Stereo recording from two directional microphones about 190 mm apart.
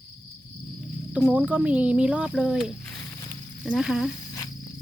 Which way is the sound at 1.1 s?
5° right (ahead or behind).